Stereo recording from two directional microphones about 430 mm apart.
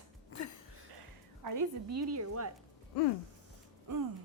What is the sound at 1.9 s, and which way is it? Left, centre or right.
Speech, right.